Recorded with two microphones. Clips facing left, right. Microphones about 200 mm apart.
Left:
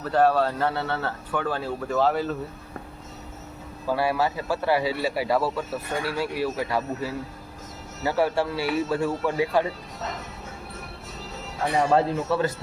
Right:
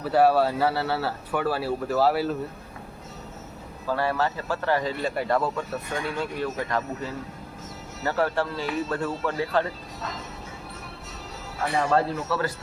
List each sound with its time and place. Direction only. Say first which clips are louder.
0.0 s speech: right 1 dB; 10° right (ahead or behind)
3.8 s a man's voice: left 2 dB; 10° left (ahead or behind)
11.9 s a man's voice: left 2 dB; 20° left (ahead or behind)